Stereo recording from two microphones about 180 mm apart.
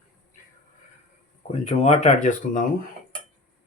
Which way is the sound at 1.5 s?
35° left (ahead or behind).